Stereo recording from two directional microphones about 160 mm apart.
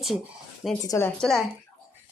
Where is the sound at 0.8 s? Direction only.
15° left (ahead or behind).